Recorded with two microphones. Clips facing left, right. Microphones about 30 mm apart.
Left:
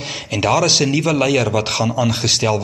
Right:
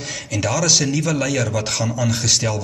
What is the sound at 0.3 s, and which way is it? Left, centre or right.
A man's voice, left.